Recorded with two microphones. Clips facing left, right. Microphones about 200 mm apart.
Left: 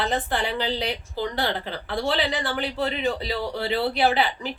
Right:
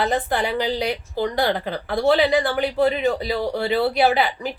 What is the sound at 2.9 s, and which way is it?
Speech, 45° right (ahead or behind).